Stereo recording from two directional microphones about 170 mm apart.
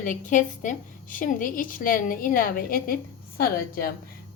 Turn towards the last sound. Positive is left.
turn(degrees=60)  # may be behind; listen again after turning